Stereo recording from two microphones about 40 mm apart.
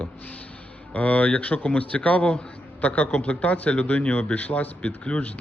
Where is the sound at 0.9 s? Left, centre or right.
Left.